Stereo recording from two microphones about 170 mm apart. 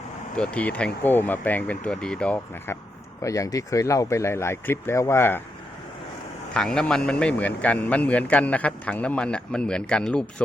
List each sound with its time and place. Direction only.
0.3 s a man's voice: 5° left (ahead or behind)
3.2 s a man's voice: 20° left (ahead or behind)
6.5 s a man's voice: 5° left (ahead or behind)